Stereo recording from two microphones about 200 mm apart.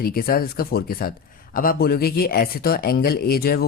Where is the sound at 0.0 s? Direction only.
50° left (ahead or behind).